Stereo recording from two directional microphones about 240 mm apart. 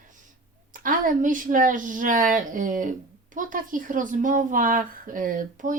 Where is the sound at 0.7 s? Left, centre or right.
Right.